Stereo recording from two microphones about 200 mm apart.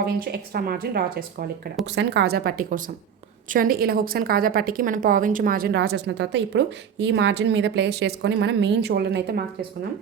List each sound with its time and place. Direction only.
0.0 s speech: 50° right (ahead or behind)